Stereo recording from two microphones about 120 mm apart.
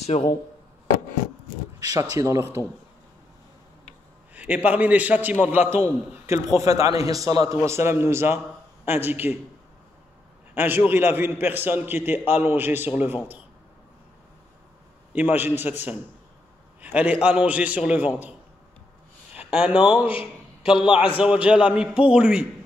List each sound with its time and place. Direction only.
0.0 s speech: 65° left (ahead or behind)
1.9 s a man's voice: 25° right (ahead or behind)
4.3 s a sound: 10° right (ahead or behind)
4.6 s a man's voice: 15° right (ahead or behind)
10.5 s a man's voice: 15° right (ahead or behind)
15.1 s a man's voice: 15° right (ahead or behind)
16.8 s a man's voice: 10° right (ahead or behind)
19.3 s speech: 10° right (ahead or behind)
20.1 s a sound: 45° left (ahead or behind)
21.2 s a man's voice: 10° right (ahead or behind)